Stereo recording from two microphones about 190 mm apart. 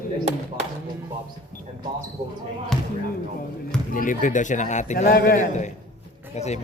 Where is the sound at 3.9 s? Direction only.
45° left (ahead or behind).